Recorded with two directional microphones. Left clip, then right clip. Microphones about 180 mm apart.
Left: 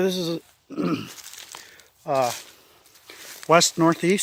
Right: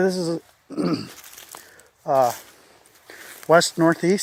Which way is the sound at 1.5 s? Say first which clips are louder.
Left 1 dB; 50° right (ahead or behind).